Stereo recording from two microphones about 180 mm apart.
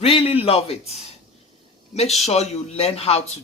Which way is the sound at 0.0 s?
30° left (ahead or behind).